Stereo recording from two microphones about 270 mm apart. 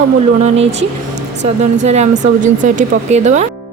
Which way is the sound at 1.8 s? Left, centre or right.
Right.